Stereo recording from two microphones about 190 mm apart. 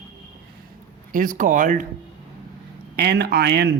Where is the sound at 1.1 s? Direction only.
45° right (ahead or behind).